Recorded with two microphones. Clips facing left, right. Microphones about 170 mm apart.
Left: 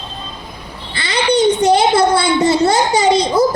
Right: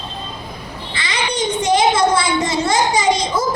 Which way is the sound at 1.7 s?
35° left (ahead or behind).